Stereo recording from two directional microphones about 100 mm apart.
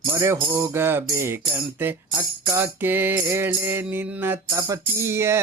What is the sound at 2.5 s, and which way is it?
Music, 20° right (ahead or behind).